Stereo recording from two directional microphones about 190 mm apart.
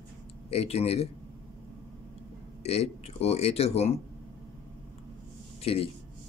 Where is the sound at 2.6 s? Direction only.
30° left (ahead or behind).